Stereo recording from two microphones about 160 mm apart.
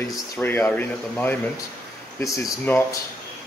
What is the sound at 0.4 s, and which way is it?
Speech, 15° left (ahead or behind).